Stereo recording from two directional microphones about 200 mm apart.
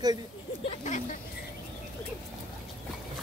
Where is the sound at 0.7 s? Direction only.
35° left (ahead or behind).